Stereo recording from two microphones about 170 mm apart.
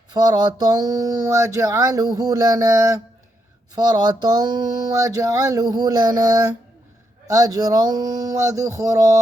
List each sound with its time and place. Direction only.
0.1 s speech: 25° right (ahead or behind)